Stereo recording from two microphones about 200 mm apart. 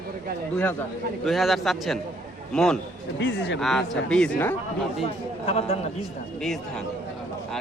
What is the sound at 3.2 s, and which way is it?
Speech, 60° left (ahead or behind).